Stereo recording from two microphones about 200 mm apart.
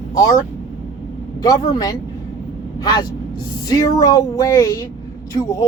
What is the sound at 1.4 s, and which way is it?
Speech, 15° left (ahead or behind).